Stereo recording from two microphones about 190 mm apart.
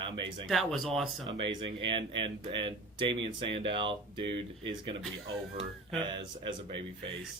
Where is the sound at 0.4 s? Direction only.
Centre (ahead or behind).